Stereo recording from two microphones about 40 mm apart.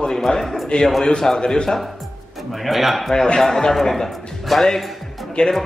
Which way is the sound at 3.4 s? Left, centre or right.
Centre.